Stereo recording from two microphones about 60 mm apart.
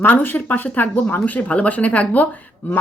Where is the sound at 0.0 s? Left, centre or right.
Left.